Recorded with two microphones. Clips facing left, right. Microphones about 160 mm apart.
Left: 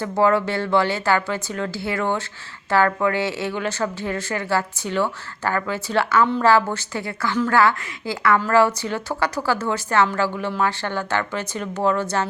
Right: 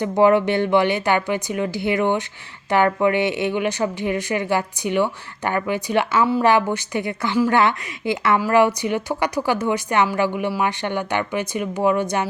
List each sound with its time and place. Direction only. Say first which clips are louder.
0.0 s a woman's voice: right 3 dB; 20° right (ahead or behind)